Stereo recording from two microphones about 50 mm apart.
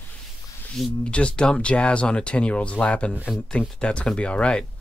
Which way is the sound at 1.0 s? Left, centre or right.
Left.